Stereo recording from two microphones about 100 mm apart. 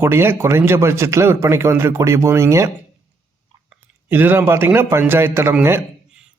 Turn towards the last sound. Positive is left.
turn(degrees=-25)  # may be behind; listen again after turning